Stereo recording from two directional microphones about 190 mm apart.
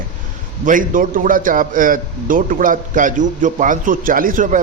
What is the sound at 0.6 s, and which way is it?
A man's voice, 45° right (ahead or behind).